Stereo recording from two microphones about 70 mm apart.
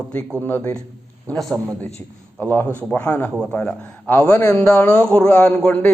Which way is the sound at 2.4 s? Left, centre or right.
Left.